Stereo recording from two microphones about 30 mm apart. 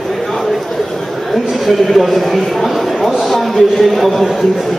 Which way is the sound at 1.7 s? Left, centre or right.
Centre.